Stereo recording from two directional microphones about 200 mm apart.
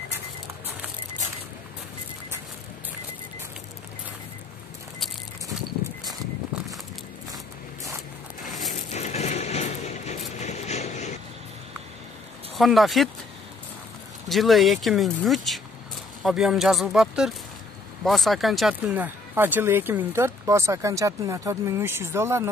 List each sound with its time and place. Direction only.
6.5 s a sound: 5° right (ahead or behind)
8.5 s crushing: centre (ahead or behind)
8.7 s a sound: 35° left (ahead or behind)
10.3 s vehicle: 35° left (ahead or behind)
12.5 s speech: centre (ahead or behind)
14.3 s speech: centre (ahead or behind)